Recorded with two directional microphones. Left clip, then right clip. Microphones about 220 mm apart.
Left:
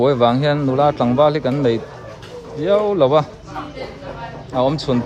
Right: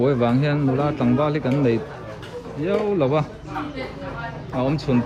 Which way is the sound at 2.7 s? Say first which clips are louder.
Left 6 dB; 35° left (ahead or behind).